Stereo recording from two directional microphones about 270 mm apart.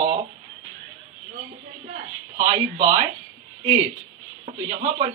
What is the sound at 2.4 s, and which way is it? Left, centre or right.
Speech, right.